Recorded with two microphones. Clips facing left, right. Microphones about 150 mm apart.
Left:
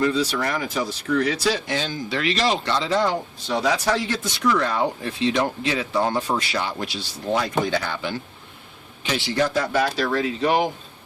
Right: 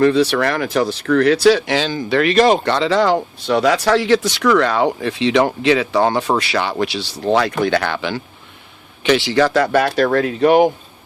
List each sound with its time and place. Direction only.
0.0 s speech: 70° right (ahead or behind)